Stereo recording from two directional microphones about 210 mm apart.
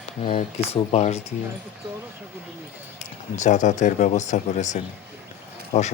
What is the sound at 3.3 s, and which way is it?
Speech, 35° left (ahead or behind).